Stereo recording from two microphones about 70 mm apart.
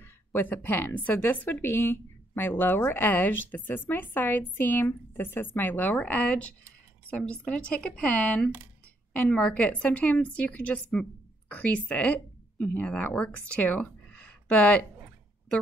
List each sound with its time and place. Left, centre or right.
0.0 s speech: left